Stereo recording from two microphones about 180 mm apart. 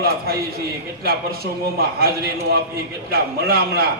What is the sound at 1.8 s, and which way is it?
A man's voice, 55° right (ahead or behind).